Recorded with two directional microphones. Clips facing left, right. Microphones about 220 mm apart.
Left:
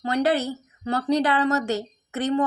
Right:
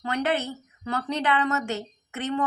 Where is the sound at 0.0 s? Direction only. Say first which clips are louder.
Left 4 dB; 35° left (ahead or behind).